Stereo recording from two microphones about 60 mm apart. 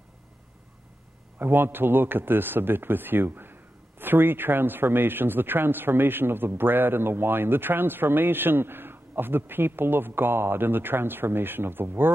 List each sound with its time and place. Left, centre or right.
1.4 s a man's voice: right